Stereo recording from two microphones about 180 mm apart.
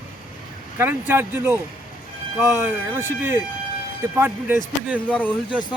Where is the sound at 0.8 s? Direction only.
10° right (ahead or behind).